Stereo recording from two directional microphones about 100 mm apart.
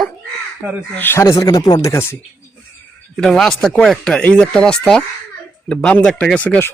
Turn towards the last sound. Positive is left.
turn(degrees=10)  # may be behind; listen again after turning